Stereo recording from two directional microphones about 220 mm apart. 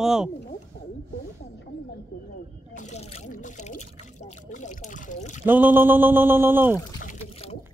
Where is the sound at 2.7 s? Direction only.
30° left (ahead or behind).